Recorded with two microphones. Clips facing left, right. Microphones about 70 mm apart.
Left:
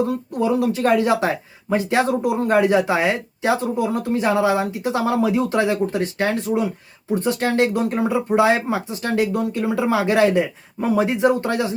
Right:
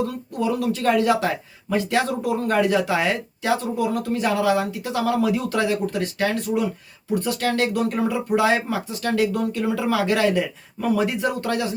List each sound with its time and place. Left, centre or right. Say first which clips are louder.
0.0 s speech: left 4 dB; left